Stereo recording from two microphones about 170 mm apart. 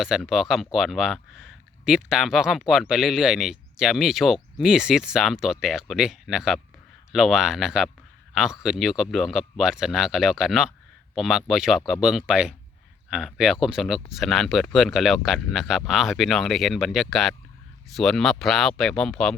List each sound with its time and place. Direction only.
0.0 s speech: 5° right (ahead or behind)